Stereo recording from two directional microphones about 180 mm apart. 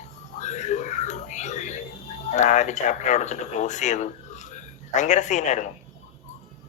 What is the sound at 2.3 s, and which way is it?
Speech, 40° left (ahead or behind).